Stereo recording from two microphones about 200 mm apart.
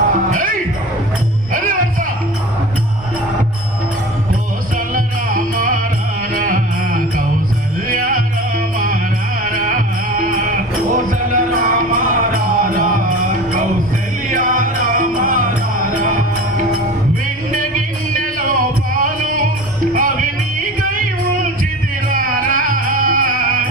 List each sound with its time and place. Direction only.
0.3 s music: 40° right (ahead or behind)
4.9 s music: 45° right (ahead or behind)
17.5 s music: 40° right (ahead or behind)